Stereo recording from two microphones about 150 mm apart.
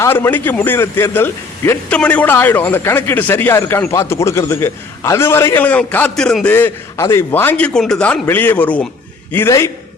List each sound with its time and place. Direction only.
0.0 s a man's voice: 15° left (ahead or behind)